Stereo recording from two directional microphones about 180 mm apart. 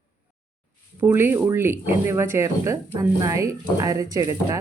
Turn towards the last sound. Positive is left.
turn(degrees=-20)  # may be behind; listen again after turning